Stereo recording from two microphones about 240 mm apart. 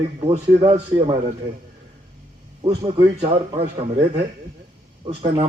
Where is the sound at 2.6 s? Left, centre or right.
Right.